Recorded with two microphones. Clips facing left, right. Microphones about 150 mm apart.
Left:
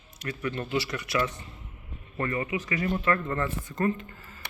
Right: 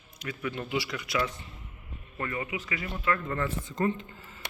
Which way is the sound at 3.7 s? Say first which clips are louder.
Left 2 dB; 20° right (ahead or behind).